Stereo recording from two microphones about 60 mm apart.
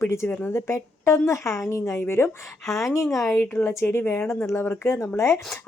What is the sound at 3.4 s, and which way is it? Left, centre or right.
A woman's voice, left.